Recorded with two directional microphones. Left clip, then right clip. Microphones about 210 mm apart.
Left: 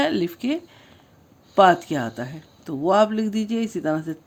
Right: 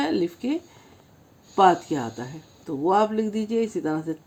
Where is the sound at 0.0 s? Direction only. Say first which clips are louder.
Left 2 dB; 40° left (ahead or behind).